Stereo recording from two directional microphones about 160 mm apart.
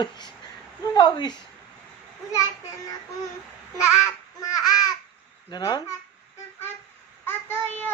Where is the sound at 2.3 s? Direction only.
20° left (ahead or behind).